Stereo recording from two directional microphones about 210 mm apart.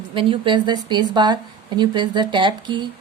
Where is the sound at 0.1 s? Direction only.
25° right (ahead or behind).